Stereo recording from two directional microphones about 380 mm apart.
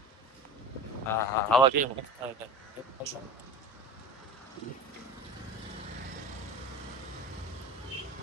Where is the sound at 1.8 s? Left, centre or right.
Right.